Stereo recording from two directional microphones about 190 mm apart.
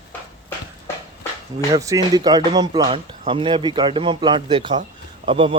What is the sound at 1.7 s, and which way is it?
Speech, 15° right (ahead or behind).